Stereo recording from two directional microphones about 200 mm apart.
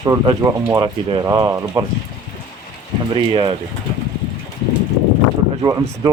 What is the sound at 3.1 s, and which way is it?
Speech, 25° right (ahead or behind).